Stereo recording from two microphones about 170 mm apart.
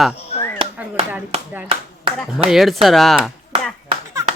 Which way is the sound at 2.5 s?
Centre (ahead or behind).